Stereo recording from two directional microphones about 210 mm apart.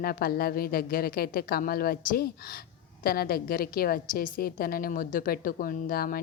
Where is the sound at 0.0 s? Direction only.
45° left (ahead or behind).